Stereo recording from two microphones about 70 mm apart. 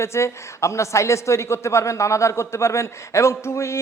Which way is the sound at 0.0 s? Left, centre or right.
Left.